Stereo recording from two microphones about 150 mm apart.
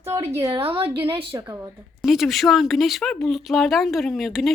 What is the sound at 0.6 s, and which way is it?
Speech, 40° right (ahead or behind).